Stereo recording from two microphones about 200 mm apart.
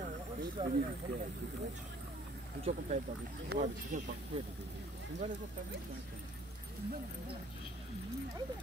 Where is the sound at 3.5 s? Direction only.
55° right (ahead or behind).